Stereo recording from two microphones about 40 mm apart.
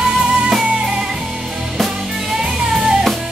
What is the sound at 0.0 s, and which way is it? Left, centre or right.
Music, right.